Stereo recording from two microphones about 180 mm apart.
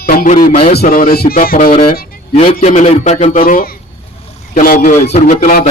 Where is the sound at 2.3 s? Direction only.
35° left (ahead or behind).